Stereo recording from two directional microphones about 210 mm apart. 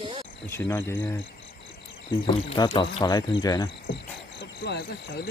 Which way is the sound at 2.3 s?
20° left (ahead or behind).